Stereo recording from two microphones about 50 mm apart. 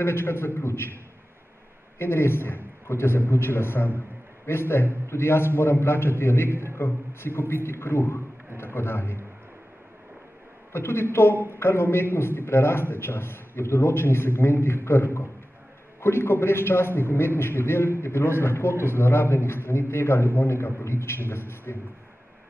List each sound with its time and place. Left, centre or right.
0.0 s a man's voice: left
2.0 s a man's voice: left
10.7 s a man's voice: left